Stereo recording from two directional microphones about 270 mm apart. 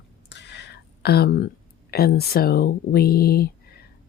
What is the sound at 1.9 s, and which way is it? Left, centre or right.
Speech, left.